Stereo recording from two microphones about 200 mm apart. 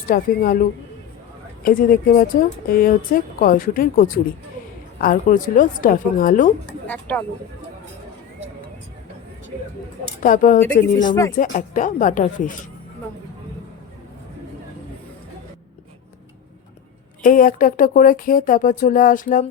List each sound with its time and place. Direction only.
0.1 s a woman's voice: 45° left (ahead or behind)
1.6 s a woman's voice: 45° left (ahead or behind)
6.8 s speech: 10° left (ahead or behind)
10.2 s speech: 40° left (ahead or behind)
11.0 s speech: 20° left (ahead or behind)
11.3 s speech: 40° left (ahead or behind)
17.2 s a woman's voice: 45° left (ahead or behind)